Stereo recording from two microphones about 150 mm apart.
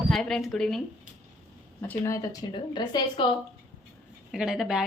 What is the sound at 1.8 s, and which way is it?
A woman's voice, 15° left (ahead or behind).